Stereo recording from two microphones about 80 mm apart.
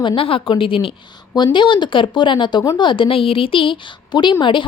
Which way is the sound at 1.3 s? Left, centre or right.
Left.